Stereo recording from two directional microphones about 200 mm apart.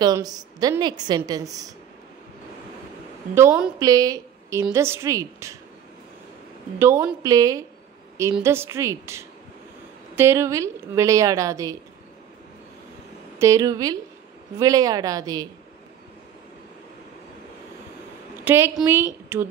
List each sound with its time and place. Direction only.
0.0 s a woman's voice: 20° right (ahead or behind)
3.3 s a woman's voice: 10° right (ahead or behind)
6.8 s a woman's voice: 10° right (ahead or behind)
13.4 s a woman's voice: 15° right (ahead or behind)
18.4 s a woman's voice: 10° right (ahead or behind)